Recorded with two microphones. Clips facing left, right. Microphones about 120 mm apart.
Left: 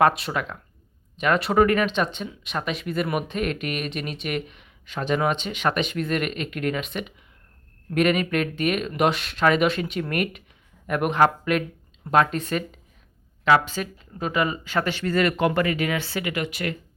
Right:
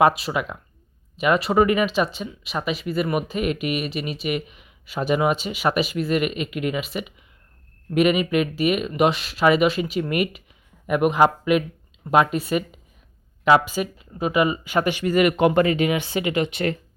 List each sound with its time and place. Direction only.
0.0 s speech: centre (ahead or behind); by 16.7 s 25° right (ahead or behind)